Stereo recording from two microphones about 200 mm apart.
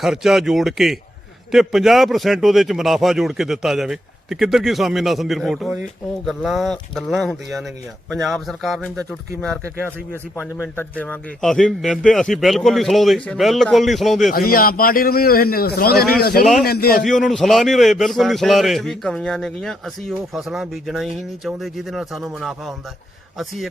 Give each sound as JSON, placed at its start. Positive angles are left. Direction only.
{"t": 0.0, "sound": "a man's voice", "side_deg": 0}
{"t": 10.6, "sound": "a man's voice", "side_deg": 10}
{"t": 14.3, "sound": "a man's voice", "side_deg": 45}
{"t": 17.2, "sound": "a man's voice", "side_deg": 0}